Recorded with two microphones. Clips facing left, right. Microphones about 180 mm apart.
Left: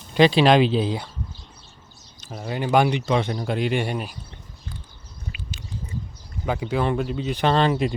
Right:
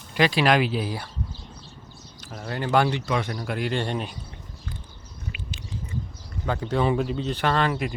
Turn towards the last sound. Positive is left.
turn(degrees=25)  # may be behind; listen again after turning